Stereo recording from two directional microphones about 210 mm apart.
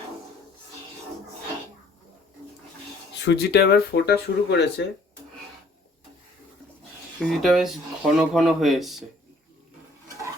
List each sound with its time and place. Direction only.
3.2 s speech: 50° left (ahead or behind)
7.2 s speech: centre (ahead or behind)